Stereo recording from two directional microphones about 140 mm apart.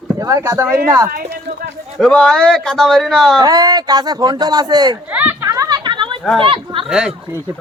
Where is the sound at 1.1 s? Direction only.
90° right.